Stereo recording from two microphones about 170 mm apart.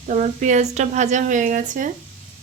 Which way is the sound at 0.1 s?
45° right (ahead or behind).